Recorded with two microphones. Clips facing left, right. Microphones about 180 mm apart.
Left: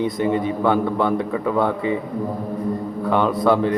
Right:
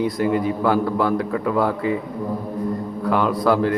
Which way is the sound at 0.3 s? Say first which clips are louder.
Even; 25° left (ahead or behind).